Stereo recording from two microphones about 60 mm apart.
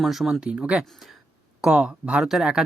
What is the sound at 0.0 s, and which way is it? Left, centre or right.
Speech, centre.